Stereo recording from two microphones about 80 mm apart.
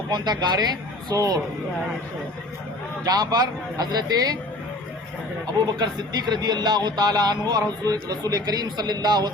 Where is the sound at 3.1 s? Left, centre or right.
Right.